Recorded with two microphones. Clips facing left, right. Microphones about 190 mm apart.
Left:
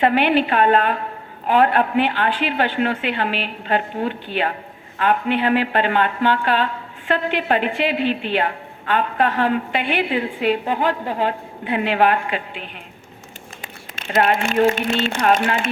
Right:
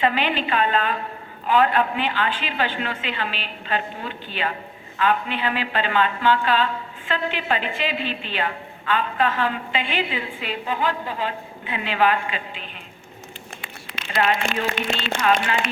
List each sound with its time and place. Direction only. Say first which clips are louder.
0.0 s a woman's voice: left 6 dB; 60° left (ahead or behind)
13.6 s a sound: left 1 dB; 45° left (ahead or behind)
15.2 s speech: left 2 dB; 45° left (ahead or behind)